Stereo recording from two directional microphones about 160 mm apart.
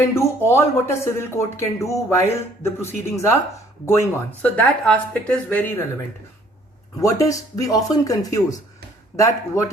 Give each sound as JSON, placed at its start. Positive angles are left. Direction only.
{"t": 0.0, "sound": "speech", "side_deg": 15}
{"t": 7.0, "sound": "speech", "side_deg": 20}